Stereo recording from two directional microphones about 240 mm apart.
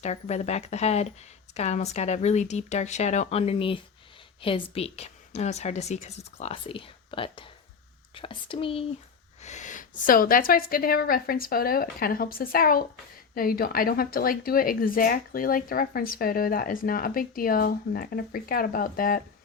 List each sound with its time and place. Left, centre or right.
0.0 s a woman's voice: left